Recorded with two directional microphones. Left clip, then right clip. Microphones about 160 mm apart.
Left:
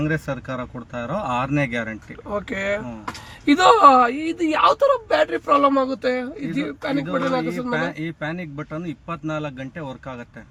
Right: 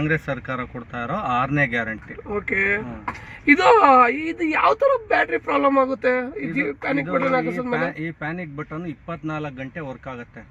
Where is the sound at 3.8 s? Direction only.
5° left (ahead or behind).